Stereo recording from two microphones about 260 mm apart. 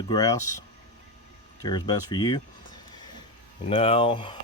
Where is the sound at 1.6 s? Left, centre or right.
Centre.